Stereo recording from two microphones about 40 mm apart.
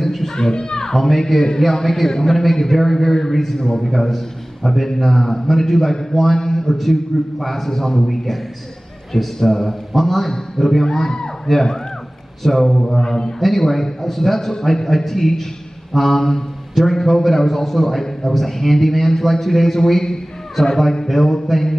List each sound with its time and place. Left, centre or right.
0.0 s music: centre
0.5 s a man's voice: centre
3.8 s a man's voice: centre
12.4 s a man's voice: centre